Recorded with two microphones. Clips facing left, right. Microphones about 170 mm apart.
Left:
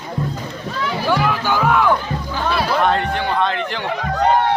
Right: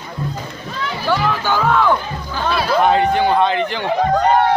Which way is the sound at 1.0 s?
15° left (ahead or behind).